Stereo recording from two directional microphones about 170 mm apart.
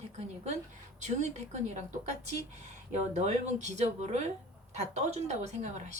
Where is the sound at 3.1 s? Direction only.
40° right (ahead or behind).